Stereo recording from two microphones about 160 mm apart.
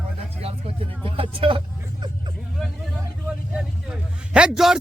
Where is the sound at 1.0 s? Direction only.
35° right (ahead or behind).